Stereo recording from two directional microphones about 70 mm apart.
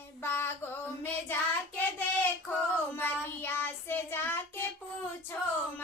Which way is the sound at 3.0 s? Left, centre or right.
Left.